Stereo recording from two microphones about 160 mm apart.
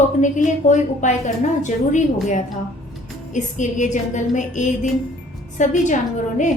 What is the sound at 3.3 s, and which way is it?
A woman's voice, 50° left (ahead or behind).